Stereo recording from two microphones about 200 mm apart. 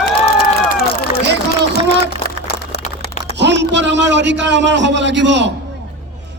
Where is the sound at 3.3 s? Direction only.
60° right (ahead or behind).